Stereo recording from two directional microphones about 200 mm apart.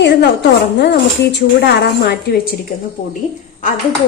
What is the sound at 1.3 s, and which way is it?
Speech, 55° left (ahead or behind).